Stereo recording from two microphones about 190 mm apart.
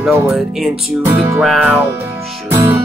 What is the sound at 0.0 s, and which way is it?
Music, 5° right (ahead or behind).